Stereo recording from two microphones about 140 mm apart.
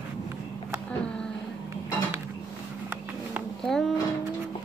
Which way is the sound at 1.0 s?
5° left (ahead or behind).